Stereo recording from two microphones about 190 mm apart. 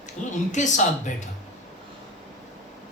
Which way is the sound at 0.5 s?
40° left (ahead or behind).